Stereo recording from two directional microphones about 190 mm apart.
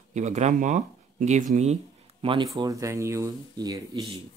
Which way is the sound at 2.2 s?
25° right (ahead or behind).